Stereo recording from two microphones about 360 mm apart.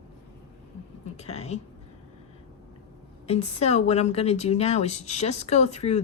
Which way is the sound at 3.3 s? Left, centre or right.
Centre.